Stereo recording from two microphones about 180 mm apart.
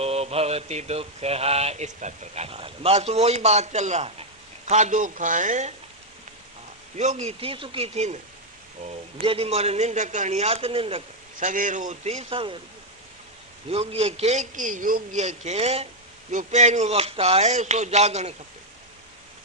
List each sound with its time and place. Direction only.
0.0 s mantra: 35° right (ahead or behind)
4.7 s speech: 40° right (ahead or behind)
6.9 s mantra: 40° right (ahead or behind)
9.2 s mantra: 30° right (ahead or behind)
11.3 s mantra: 45° right (ahead or behind); by 12.5 s 30° right (ahead or behind)
13.7 s mantra: 30° right (ahead or behind)